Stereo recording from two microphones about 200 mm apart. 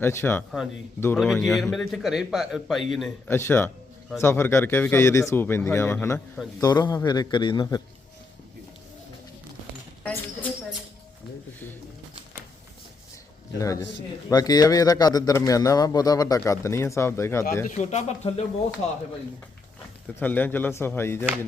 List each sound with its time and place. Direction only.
0.0 s a man's voice: 10° left (ahead or behind)
3.2 s a man's voice: 10° left (ahead or behind)
10.0 s a sound: 10° left (ahead or behind)
13.6 s speech: 15° left (ahead or behind)
17.7 s speech: 35° left (ahead or behind)
20.1 s speech: 10° left (ahead or behind)